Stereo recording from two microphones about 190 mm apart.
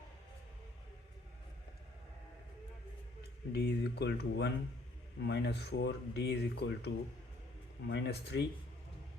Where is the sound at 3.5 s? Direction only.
60° left (ahead or behind).